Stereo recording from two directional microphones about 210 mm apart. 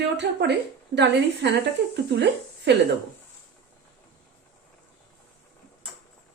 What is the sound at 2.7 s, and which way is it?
Speech, 55° right (ahead or behind).